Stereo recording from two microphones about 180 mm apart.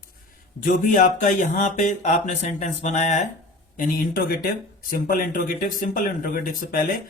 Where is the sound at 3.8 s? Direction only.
55° left (ahead or behind).